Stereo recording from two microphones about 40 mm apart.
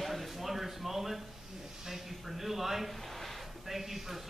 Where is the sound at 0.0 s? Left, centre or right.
Centre.